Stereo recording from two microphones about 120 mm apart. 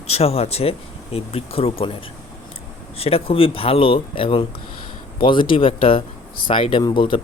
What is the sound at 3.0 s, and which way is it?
Speech, 55° left (ahead or behind).